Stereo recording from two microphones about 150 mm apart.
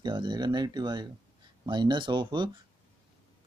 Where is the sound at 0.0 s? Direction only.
30° right (ahead or behind).